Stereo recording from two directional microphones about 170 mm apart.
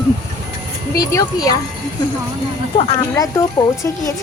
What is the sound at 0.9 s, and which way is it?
Speech, 20° left (ahead or behind).